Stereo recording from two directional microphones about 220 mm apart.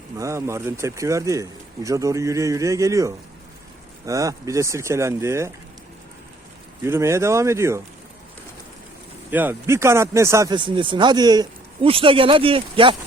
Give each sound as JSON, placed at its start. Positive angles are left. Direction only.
{"t": 0.2, "sound": "speech", "side_deg": -15}
{"t": 6.8, "sound": "speech", "side_deg": -10}
{"t": 9.3, "sound": "speech", "side_deg": -10}